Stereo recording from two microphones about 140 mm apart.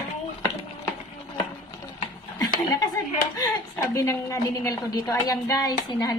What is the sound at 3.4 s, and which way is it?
A woman's voice, 20° left (ahead or behind).